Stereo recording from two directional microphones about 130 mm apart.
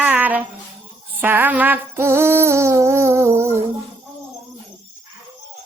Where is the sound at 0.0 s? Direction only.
15° right (ahead or behind).